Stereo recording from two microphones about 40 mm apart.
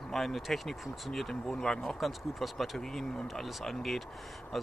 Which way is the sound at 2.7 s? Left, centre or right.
Centre.